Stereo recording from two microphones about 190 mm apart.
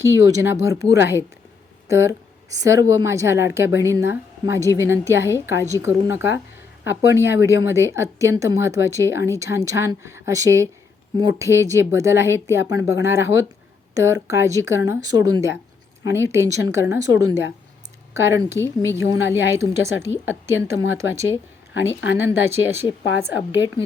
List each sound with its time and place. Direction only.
0.0 s speech: 15° right (ahead or behind)